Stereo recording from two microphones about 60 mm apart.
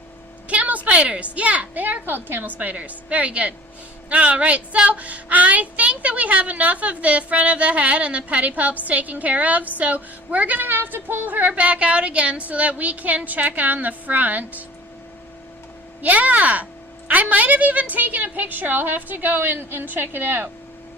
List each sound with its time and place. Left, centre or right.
0.4 s a sound: right
0.9 s speech: centre
16.0 s a woman's voice: right